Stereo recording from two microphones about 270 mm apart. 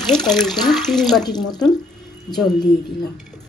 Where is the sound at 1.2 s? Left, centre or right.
Centre.